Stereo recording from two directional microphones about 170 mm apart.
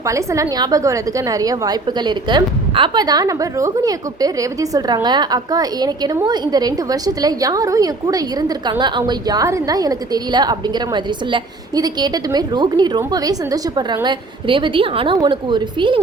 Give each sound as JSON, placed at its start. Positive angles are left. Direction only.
{"t": 0.1, "sound": "a woman's voice", "side_deg": -20}